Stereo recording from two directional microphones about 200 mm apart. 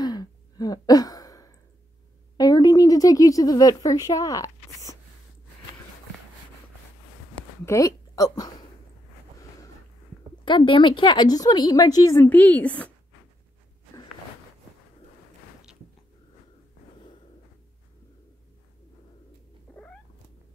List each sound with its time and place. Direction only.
0.0 s a sound: 20° left (ahead or behind)
7.6 s a woman's voice: 15° left (ahead or behind)
10.4 s a woman's voice: 25° left (ahead or behind); by 12.9 s 5° left (ahead or behind)
19.7 s cat: 5° left (ahead or behind)